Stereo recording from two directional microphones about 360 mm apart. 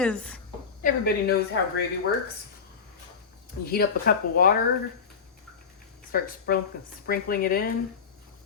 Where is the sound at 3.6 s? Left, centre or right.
Left.